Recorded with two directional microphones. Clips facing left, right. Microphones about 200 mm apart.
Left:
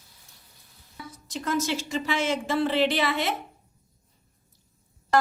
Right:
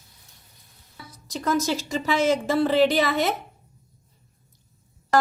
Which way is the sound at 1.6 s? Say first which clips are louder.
Right 3 dB; 40° right (ahead or behind).